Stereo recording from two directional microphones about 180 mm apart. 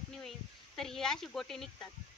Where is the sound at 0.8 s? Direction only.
5° left (ahead or behind).